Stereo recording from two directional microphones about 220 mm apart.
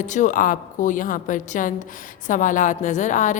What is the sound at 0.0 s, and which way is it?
A woman's voice, 35° left (ahead or behind).